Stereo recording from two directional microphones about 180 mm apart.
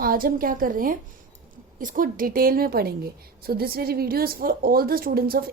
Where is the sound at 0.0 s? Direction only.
55° right (ahead or behind).